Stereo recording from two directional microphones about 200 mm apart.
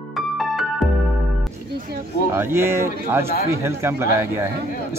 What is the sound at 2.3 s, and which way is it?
Speech, 10° right (ahead or behind).